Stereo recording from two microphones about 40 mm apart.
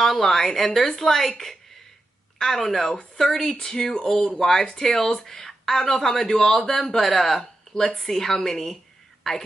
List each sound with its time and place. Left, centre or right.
0.0 s speech: centre
2.4 s speech: centre